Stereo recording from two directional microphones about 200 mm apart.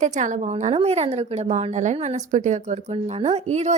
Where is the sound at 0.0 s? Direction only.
35° right (ahead or behind).